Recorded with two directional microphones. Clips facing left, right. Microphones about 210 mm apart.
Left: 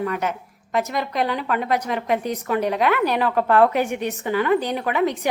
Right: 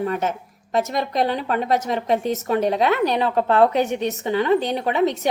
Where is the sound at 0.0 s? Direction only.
25° right (ahead or behind).